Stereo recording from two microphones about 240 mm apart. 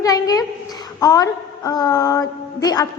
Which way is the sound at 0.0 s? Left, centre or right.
Centre.